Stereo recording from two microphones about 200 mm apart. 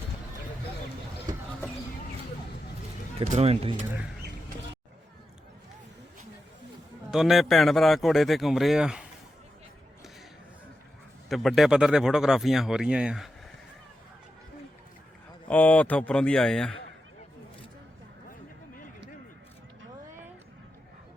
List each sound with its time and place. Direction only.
3.2 s speech: 35° right (ahead or behind)
7.1 s speech: centre (ahead or behind)
11.3 s speech: centre (ahead or behind)
15.4 s speech: 5° left (ahead or behind)
18.3 s a sound: 45° left (ahead or behind)